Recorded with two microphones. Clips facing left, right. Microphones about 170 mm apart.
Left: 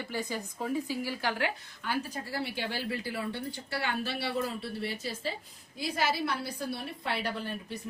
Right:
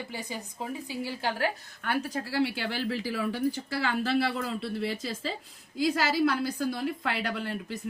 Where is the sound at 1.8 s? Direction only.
70° right (ahead or behind).